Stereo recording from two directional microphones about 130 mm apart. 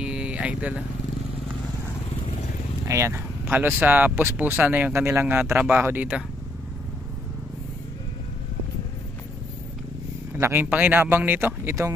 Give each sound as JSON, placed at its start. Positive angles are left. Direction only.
{"t": 0.0, "sound": "a sound", "side_deg": -10}
{"t": 2.9, "sound": "speech", "side_deg": -20}
{"t": 10.3, "sound": "speech", "side_deg": -20}